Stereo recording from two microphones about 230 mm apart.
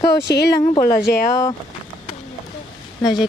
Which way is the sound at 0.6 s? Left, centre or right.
Centre.